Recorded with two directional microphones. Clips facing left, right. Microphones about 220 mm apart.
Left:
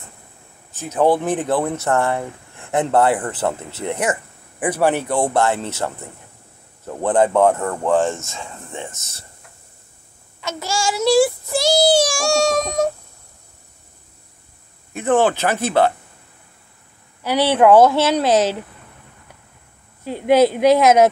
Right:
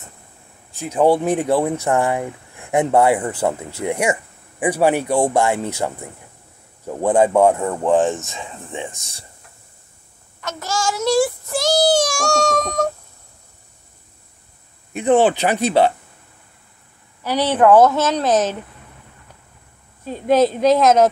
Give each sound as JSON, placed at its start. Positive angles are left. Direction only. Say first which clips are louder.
{"t": 0.7, "sound": "speech", "louder": "right 1 dB", "side_deg": -15}
{"t": 10.4, "sound": "child singing", "louder": "even", "side_deg": 10}
{"t": 15.0, "sound": "speech", "louder": "right 2 dB", "side_deg": -15}
{"t": 17.2, "sound": "child singing", "louder": "left 1 dB", "side_deg": 10}
{"t": 20.1, "sound": "child singing", "louder": "left 1 dB", "side_deg": 10}